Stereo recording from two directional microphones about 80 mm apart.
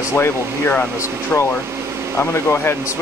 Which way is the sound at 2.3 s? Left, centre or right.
Left.